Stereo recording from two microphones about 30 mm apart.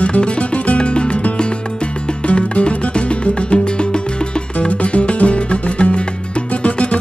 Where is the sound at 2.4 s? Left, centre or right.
Left.